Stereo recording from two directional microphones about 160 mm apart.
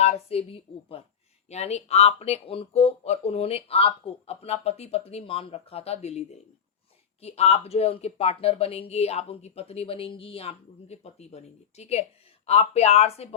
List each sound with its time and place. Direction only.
0.0 s speech: 40° left (ahead or behind)